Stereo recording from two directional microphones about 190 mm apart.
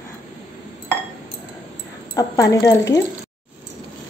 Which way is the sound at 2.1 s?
15° left (ahead or behind).